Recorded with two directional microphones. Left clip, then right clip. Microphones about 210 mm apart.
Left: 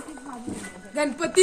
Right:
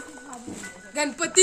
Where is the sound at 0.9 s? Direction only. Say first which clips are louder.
Left 1 dB; 45° right (ahead or behind).